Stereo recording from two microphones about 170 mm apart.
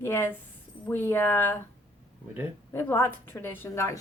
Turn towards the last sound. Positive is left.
turn(degrees=15)  # may be behind; listen again after turning